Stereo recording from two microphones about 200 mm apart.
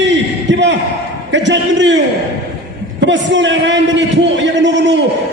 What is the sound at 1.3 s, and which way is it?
Speech, 65° right (ahead or behind).